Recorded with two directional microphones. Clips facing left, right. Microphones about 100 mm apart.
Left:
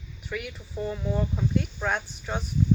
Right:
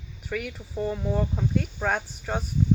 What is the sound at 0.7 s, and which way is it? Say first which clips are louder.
Speech: right 2 dB; 45° right (ahead or behind).